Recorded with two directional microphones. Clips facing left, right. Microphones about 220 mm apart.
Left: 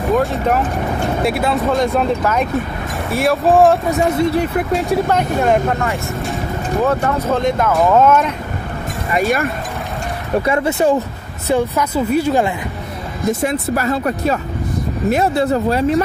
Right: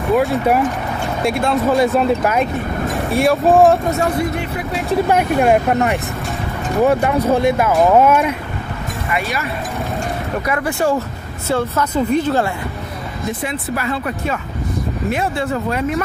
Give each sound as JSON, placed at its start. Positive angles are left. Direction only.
{"t": 0.1, "sound": "speech", "side_deg": -10}
{"t": 1.2, "sound": "speech", "side_deg": 5}
{"t": 3.9, "sound": "speech", "side_deg": 25}
{"t": 5.1, "sound": "speech", "side_deg": -10}
{"t": 10.4, "sound": "speech", "side_deg": 25}
{"t": 13.3, "sound": "speech", "side_deg": 45}